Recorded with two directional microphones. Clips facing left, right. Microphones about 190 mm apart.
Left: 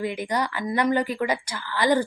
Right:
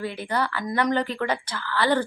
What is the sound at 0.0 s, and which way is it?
Speech, 15° left (ahead or behind).